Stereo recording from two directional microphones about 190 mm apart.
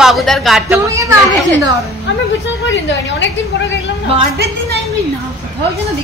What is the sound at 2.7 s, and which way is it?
Speech, 75° left (ahead or behind).